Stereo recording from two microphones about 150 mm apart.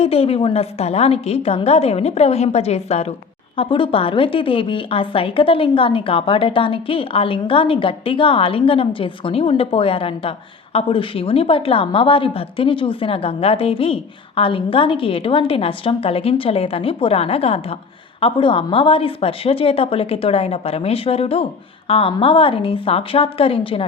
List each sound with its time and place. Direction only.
0.0 s a woman's voice: 40° left (ahead or behind)